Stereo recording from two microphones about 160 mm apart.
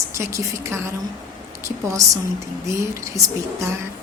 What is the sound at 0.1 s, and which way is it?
A woman's voice, 20° right (ahead or behind).